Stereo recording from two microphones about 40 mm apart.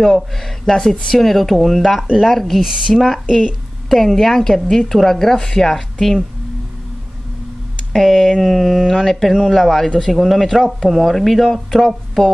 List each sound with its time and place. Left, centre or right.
0.0 s a woman's voice: centre
0.7 s speech: centre
1.2 s speech: centre
3.3 s speech: centre
3.9 s a woman's voice: centre
7.9 s speech: centre